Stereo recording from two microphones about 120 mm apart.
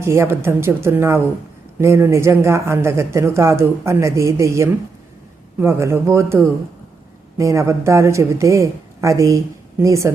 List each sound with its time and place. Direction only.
0.0 s speech: 20° right (ahead or behind)